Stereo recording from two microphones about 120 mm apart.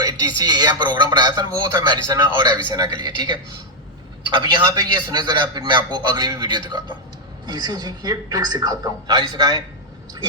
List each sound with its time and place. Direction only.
0.0 s speech: 35° right (ahead or behind)